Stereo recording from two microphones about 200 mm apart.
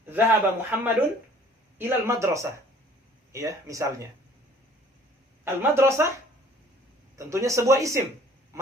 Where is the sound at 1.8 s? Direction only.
10° right (ahead or behind).